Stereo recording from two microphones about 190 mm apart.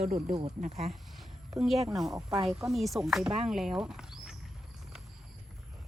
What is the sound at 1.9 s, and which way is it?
A woman's voice, centre (ahead or behind).